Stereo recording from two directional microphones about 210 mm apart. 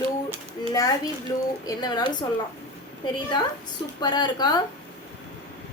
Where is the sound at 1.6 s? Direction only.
20° left (ahead or behind).